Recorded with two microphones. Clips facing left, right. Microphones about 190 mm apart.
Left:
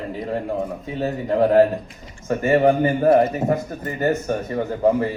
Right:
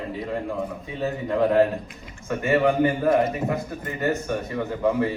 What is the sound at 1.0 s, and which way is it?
A woman's voice, 35° left (ahead or behind).